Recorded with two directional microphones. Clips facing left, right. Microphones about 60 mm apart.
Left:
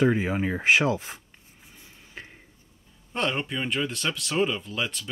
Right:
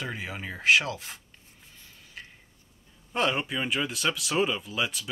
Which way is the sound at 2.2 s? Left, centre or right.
Left.